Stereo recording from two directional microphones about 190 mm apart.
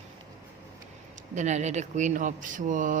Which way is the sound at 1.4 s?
40° right (ahead or behind).